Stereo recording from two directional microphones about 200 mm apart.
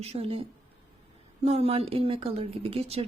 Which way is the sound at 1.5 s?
30° right (ahead or behind).